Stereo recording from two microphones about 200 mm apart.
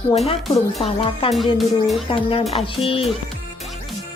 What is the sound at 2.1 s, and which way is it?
Speech, 25° left (ahead or behind).